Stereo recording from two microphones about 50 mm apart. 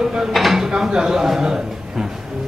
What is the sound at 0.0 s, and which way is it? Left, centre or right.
Speech, centre.